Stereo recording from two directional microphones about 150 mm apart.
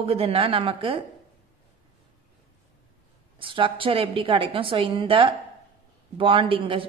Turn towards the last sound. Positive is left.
turn(degrees=-35)  # may be behind; listen again after turning